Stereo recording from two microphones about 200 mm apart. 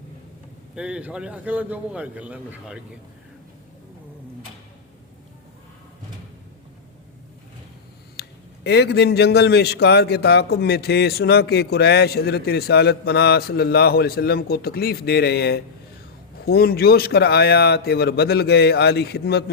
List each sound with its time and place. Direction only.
0.8 s a man's voice: 5° right (ahead or behind)
8.1 s a man's voice: 55° left (ahead or behind)